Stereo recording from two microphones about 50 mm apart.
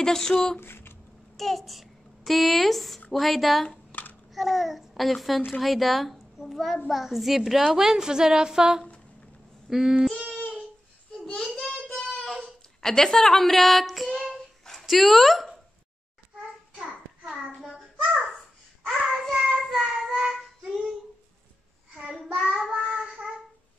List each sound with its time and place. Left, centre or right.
0.0 s speech: centre
0.6 s a sound: left
1.3 s a child's voice: centre
3.9 s babbling: left
4.3 s a child's voice: centre
10.3 s a sound: centre
11.9 s child singing: centre
12.8 s speech: centre
14.6 s dog: centre
17.6 s child singing: centre
19.0 s child singing: centre
22.5 s child singing: centre